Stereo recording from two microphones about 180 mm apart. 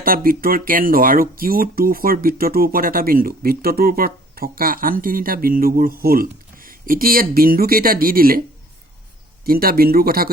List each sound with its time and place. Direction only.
0.0 s speech: 55° right (ahead or behind)
9.4 s speech: 55° right (ahead or behind)